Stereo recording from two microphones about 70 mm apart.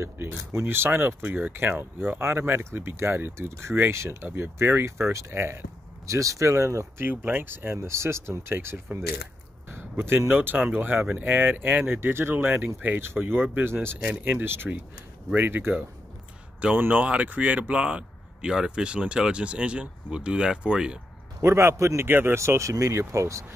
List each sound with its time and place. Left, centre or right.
0.0 s speech: right
7.0 s speech: right
9.7 s a sound: right
10.3 s speech: right
21.4 s speech: right
22.0 s speech: right
22.4 s speech: right